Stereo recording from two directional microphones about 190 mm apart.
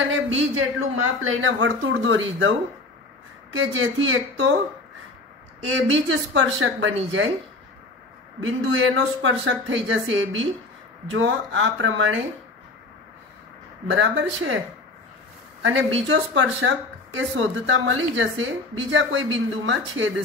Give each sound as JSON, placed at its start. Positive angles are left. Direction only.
{"t": 0.1, "sound": "speech", "side_deg": -90}
{"t": 3.5, "sound": "speech", "side_deg": -90}
{"t": 5.6, "sound": "speech", "side_deg": -90}
{"t": 8.4, "sound": "speech", "side_deg": -90}
{"t": 13.8, "sound": "speech", "side_deg": -80}
{"t": 15.6, "sound": "speech", "side_deg": -90}